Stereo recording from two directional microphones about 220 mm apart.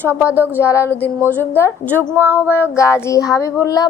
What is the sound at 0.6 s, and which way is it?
Child singing, 10° left (ahead or behind).